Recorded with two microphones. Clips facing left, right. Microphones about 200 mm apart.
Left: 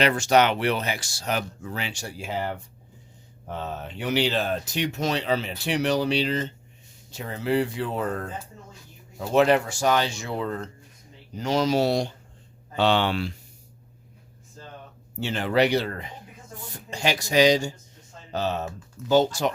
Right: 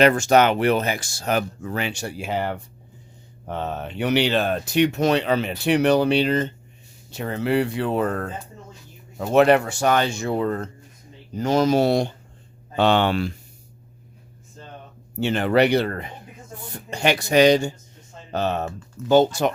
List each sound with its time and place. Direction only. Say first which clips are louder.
0.0 s speech: right 4 dB; 50° right (ahead or behind)
7.1 s speech: right 3 dB; 65° right (ahead or behind); by 13.3 s 50° right (ahead or behind)
15.2 s speech: right 4 dB; 60° right (ahead or behind)